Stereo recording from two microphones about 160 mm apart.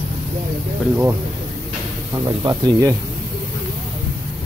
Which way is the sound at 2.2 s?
25° right (ahead or behind).